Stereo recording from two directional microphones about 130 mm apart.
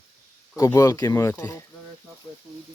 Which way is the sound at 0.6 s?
25° left (ahead or behind).